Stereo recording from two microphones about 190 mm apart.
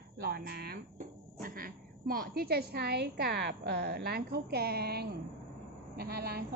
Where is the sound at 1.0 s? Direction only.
50° right (ahead or behind).